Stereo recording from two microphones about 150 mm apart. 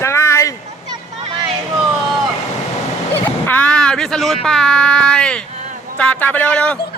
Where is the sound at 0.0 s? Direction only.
20° left (ahead or behind).